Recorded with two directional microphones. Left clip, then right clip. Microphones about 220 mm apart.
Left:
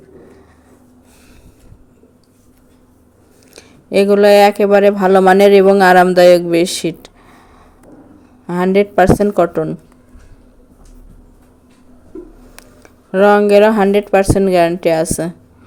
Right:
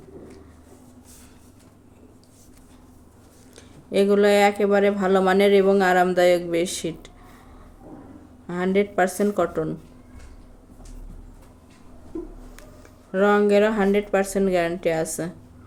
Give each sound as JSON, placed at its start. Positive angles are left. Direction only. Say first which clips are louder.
{"t": 3.5, "sound": "speech", "louder": "left 9 dB", "side_deg": 40}
{"t": 8.4, "sound": "a woman's voice", "louder": "left 9 dB", "side_deg": 40}
{"t": 12.5, "sound": "speech", "louder": "left 5 dB", "side_deg": 40}